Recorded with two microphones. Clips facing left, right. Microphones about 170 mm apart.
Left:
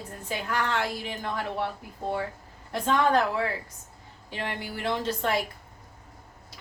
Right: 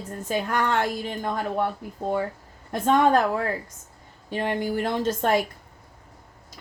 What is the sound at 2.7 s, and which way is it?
A woman's voice, 50° right (ahead or behind).